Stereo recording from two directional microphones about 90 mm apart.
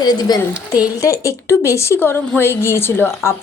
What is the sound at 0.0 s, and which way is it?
Speech, 50° left (ahead or behind).